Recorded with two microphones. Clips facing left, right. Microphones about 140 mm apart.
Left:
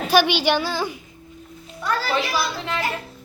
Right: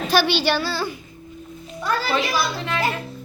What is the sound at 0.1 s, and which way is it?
Speech, 15° left (ahead or behind).